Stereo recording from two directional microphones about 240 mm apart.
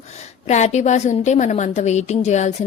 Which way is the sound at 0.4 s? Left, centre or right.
Left.